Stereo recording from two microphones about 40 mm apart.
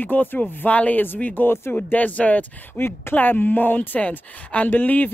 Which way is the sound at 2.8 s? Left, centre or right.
Left.